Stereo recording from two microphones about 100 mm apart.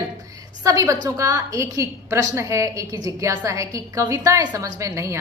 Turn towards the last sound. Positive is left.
turn(degrees=-30)  # may be behind; listen again after turning